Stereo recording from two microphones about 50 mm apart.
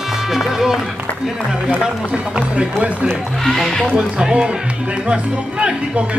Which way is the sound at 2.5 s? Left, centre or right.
Right.